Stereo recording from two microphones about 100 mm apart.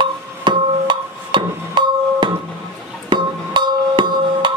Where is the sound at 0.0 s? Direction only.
50° right (ahead or behind).